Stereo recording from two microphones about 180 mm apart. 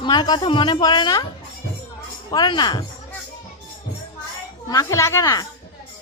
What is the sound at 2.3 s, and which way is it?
Speech, 25° left (ahead or behind).